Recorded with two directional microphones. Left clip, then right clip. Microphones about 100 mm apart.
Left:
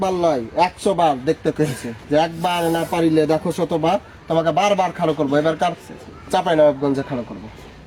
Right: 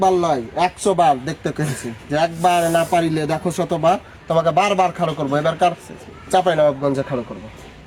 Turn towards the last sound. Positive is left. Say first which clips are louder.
# left 1 dB
turn(degrees=-30)  # may be behind; listen again after turning